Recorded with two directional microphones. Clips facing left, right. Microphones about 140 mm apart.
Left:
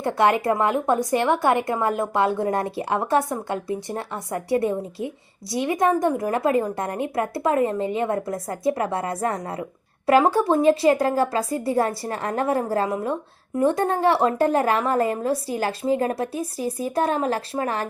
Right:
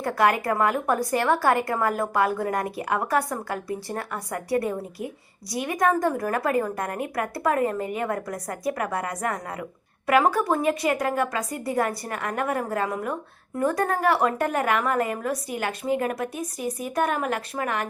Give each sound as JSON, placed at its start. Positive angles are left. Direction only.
{"t": 0.0, "sound": "a woman's voice", "side_deg": 25}